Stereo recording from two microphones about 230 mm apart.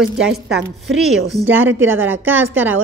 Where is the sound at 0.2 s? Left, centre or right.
Centre.